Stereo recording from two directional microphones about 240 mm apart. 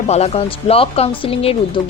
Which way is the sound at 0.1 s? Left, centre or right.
Left.